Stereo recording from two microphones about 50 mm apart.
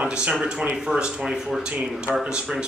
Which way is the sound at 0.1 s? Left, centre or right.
Centre.